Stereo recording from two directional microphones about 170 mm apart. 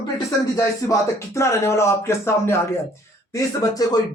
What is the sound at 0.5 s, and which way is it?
Speech, 20° left (ahead or behind).